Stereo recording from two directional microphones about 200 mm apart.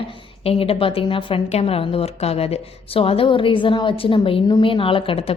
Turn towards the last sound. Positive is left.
turn(degrees=25)  # may be behind; listen again after turning